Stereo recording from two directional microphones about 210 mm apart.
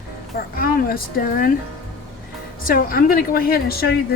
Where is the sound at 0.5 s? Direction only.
45° left (ahead or behind).